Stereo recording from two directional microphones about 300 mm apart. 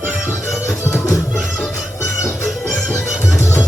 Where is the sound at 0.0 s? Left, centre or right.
Centre.